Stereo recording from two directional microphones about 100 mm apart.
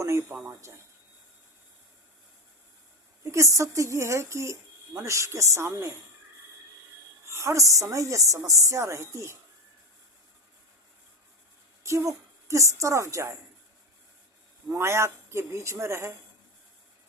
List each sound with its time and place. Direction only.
0.0 s speech: 25° right (ahead or behind)
3.3 s a woman's voice: 30° right (ahead or behind)
7.3 s a woman's voice: 30° right (ahead or behind)
11.8 s a woman's voice: 30° right (ahead or behind)
14.7 s a woman's voice: 25° right (ahead or behind)